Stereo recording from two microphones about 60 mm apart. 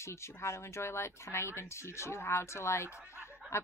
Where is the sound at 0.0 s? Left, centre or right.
Left.